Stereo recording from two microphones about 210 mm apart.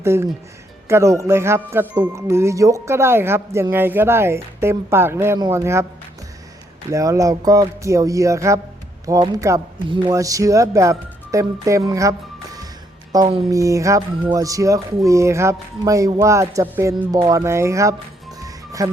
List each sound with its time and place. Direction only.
0.0 s speech: 10° right (ahead or behind)
6.9 s speech: 15° right (ahead or behind)
13.1 s speech: 20° right (ahead or behind)
18.3 s music: 15° right (ahead or behind)